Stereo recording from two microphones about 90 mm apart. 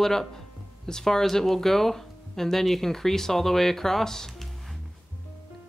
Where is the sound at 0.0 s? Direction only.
5° left (ahead or behind).